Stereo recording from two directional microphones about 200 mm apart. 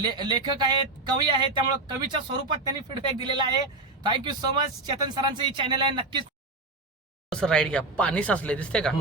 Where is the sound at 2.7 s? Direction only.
20° right (ahead or behind).